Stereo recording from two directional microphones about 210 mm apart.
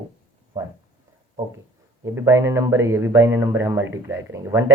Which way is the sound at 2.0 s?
10° right (ahead or behind).